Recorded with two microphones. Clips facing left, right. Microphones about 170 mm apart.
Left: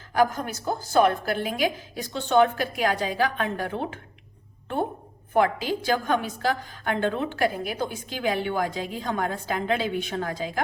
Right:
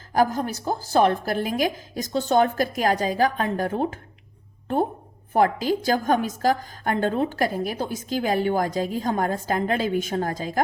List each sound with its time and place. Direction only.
0.1 s a woman's voice: 35° right (ahead or behind)
5.3 s a woman's voice: 40° right (ahead or behind)